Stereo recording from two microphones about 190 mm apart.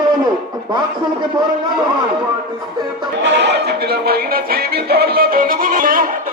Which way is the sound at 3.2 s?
65° right (ahead or behind).